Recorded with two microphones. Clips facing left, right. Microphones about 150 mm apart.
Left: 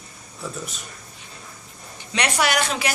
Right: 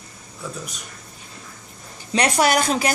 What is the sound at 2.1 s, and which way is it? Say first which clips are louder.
Speech: right 4 dB; 40° right (ahead or behind).